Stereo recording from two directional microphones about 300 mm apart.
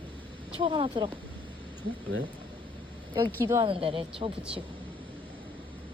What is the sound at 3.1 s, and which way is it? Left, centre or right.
A woman's voice, centre.